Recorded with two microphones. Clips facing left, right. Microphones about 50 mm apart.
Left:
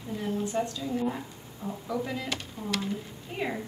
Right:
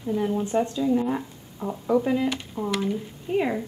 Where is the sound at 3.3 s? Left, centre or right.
Centre.